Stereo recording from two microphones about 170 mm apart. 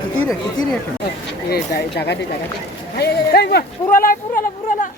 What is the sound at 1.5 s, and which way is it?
Speech, 70° left (ahead or behind).